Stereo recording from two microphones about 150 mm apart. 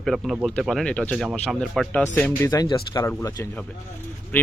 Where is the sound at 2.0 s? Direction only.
15° left (ahead or behind).